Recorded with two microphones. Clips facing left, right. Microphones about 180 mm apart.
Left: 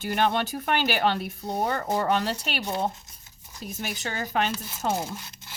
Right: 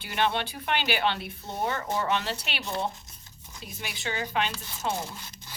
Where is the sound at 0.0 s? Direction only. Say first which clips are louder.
Left 3 dB; 45° left (ahead or behind).